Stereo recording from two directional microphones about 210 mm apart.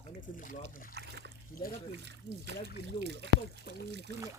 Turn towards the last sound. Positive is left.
turn(degrees=50)  # may be behind; listen again after turning